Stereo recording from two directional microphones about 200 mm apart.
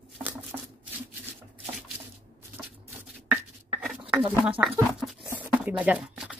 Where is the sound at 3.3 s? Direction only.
5° right (ahead or behind).